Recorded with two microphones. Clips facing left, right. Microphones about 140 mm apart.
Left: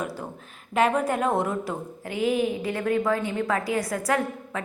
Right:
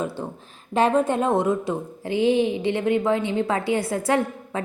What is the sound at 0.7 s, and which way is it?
A woman's voice, 30° right (ahead or behind).